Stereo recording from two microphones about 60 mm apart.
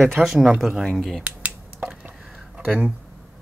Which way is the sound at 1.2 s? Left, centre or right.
Right.